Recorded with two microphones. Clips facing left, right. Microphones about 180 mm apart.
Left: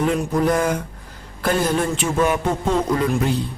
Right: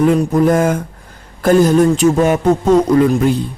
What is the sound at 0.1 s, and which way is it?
A man's voice, 50° right (ahead or behind).